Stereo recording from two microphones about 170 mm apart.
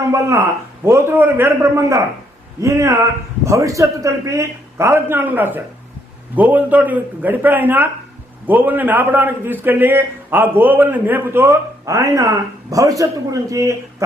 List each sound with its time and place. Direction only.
0.1 s a man's voice: 20° right (ahead or behind)